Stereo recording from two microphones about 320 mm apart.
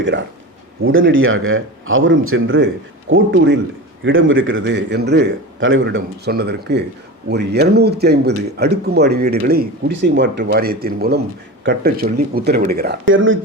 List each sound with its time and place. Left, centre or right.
0.0 s speech: right